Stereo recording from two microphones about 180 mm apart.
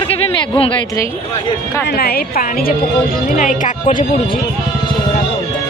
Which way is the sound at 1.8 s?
60° left (ahead or behind).